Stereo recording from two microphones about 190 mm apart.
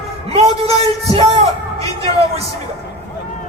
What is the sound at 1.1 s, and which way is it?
Music, 30° right (ahead or behind).